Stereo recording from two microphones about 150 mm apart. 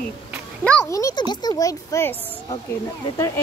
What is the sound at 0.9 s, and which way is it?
A child's voice, 20° left (ahead or behind).